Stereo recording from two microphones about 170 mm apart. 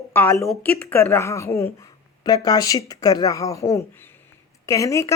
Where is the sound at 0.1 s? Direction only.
15° left (ahead or behind).